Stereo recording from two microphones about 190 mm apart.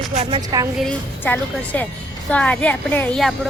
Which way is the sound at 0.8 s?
10° left (ahead or behind).